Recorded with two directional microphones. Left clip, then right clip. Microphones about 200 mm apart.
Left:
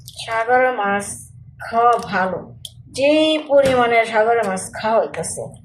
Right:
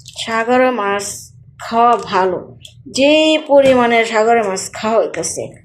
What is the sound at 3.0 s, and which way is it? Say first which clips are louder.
Speech: right 4 dB; 40° right (ahead or behind).